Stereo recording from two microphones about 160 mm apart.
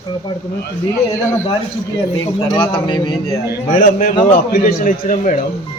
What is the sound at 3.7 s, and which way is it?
Speech, 55° left (ahead or behind).